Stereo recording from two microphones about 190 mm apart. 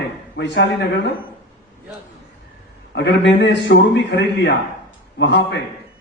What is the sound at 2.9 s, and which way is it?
A man's voice, 65° left (ahead or behind).